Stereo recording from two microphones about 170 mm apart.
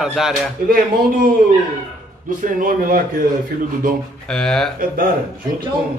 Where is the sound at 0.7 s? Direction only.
55° right (ahead or behind).